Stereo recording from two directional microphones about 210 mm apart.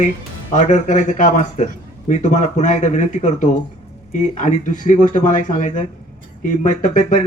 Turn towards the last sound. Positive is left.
turn(degrees=35)  # may be behind; listen again after turning